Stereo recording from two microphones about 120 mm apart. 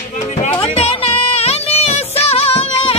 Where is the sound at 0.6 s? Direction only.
55° left (ahead or behind).